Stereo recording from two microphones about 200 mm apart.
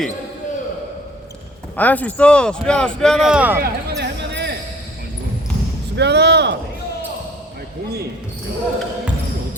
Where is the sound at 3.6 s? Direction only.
55° right (ahead or behind).